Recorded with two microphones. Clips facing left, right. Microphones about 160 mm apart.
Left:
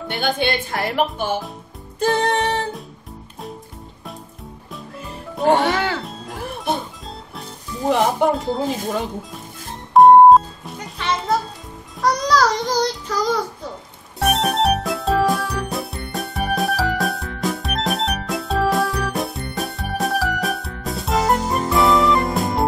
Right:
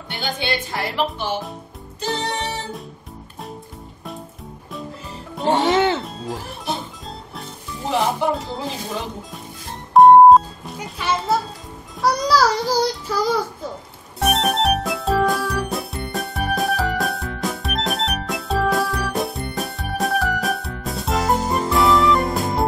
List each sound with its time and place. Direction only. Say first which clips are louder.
0.2 s speech: left 4 dB; 55° left (ahead or behind)
2.0 s music: left 6 dB; 50° left (ahead or behind)
5.6 s music: right 3 dB; 20° right (ahead or behind)
7.9 s speech: left 3 dB; 50° left (ahead or behind)
9.9 s music: even; centre (ahead or behind)
12.0 s child singing: even; 5° right (ahead or behind)
14.2 s music: left 1 dB; centre (ahead or behind)